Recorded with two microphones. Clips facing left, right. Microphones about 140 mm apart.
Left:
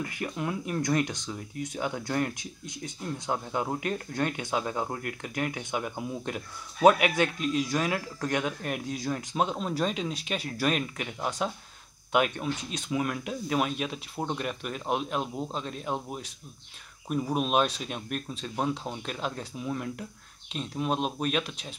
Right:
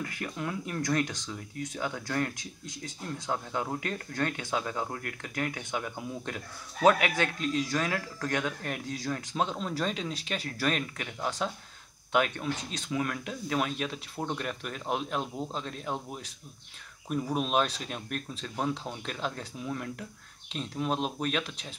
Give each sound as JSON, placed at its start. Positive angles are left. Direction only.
{"t": 0.2, "sound": "speech", "side_deg": 15}